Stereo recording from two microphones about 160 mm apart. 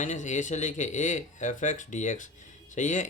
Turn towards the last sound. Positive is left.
turn(degrees=50)  # may be behind; listen again after turning